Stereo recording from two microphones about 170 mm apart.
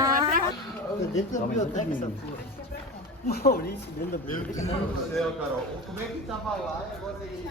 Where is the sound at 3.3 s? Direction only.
65° left (ahead or behind).